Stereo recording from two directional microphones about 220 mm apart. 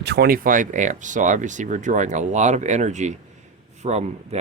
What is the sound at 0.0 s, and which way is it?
Speech, 50° right (ahead or behind).